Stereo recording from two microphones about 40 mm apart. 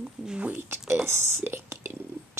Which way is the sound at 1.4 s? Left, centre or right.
Right.